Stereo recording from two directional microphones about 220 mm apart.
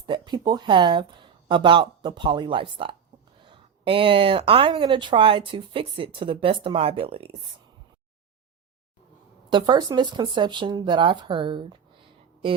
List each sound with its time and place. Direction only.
0.0 s speech: 20° right (ahead or behind)
9.5 s speech: 20° right (ahead or behind)